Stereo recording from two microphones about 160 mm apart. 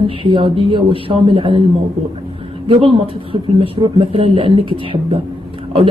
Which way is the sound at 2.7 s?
35° right (ahead or behind).